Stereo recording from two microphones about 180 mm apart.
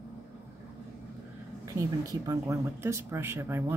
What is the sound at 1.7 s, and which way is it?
Speech, 20° right (ahead or behind).